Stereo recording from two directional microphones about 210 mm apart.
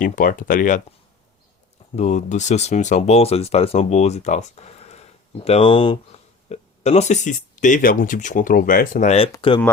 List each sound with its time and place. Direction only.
0.0 s speech: 40° left (ahead or behind)
2.0 s speech: 35° left (ahead or behind)